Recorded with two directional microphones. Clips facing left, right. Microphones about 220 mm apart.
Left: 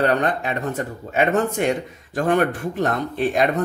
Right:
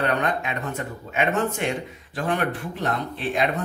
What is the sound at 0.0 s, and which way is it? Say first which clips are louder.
Speech: left 4 dB; 35° left (ahead or behind).